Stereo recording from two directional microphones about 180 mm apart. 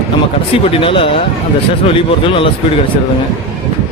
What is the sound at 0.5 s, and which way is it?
Speech, 30° left (ahead or behind).